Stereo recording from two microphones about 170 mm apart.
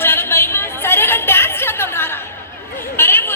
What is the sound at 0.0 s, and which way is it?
Chatter, 15° left (ahead or behind).